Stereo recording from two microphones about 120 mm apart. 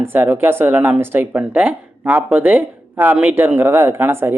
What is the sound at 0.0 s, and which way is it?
Speech, 20° right (ahead or behind).